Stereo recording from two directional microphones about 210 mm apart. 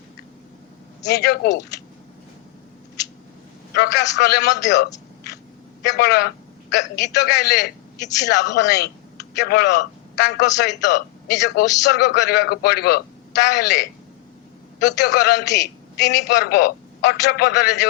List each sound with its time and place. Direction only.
1.0 s a man's voice: 50° left (ahead or behind)
3.8 s a man's voice: 55° left (ahead or behind)